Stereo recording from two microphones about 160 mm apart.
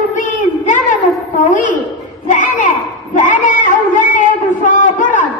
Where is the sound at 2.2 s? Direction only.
55° left (ahead or behind).